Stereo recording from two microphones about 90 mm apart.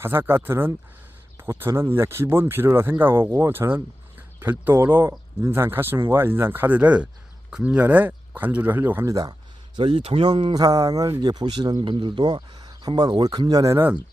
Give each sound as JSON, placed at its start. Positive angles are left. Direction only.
{"t": 0.0, "sound": "speech", "side_deg": -25}
{"t": 9.7, "sound": "speech", "side_deg": -80}
{"t": 10.5, "sound": "speech", "side_deg": -40}
{"t": 11.9, "sound": "speech", "side_deg": -70}
{"t": 12.5, "sound": "a sound", "side_deg": -45}
{"t": 13.0, "sound": "speech", "side_deg": -50}